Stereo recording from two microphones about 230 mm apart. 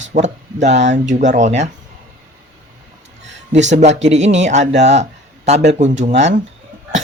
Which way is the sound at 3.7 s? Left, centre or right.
Right.